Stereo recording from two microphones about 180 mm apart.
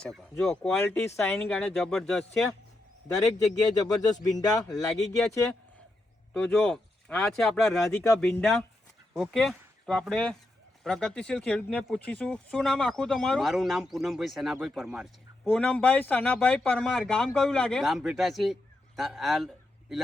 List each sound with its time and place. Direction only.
0.0 s speech: centre (ahead or behind)
3.8 s speech: 20° left (ahead or behind)
4.9 s speech: centre (ahead or behind)
6.3 s speech: 5° left (ahead or behind)